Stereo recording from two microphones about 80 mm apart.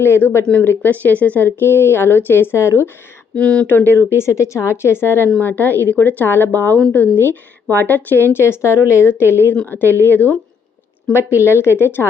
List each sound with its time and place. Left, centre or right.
0.0 s speech: left
0.4 s speech: centre; by 2.9 s left
3.3 s speech: centre
11.3 s speech: left